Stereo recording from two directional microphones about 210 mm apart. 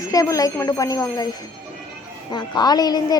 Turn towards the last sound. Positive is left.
turn(degrees=20)  # may be behind; listen again after turning